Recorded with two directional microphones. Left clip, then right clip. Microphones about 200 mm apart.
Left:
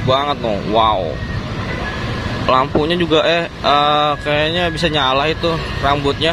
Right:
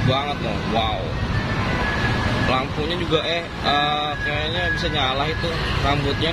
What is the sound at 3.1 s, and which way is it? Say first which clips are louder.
Speech: left 8 dB; 40° left (ahead or behind).